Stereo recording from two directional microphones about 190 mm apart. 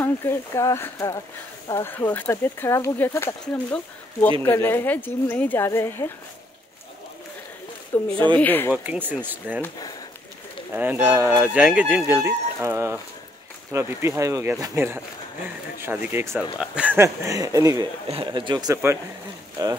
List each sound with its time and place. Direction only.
0.0 s speech: 10° left (ahead or behind)
7.9 s speech: 10° left (ahead or behind)
8.7 s speech: 10° right (ahead or behind)
9.6 s speech: 20° left (ahead or behind)
10.7 s speech: 10° right (ahead or behind)
18.0 s speech: 30° right (ahead or behind)